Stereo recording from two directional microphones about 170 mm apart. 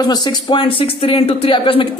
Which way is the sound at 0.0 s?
25° left (ahead or behind).